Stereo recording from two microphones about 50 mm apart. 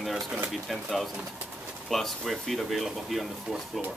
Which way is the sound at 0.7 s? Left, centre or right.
Centre.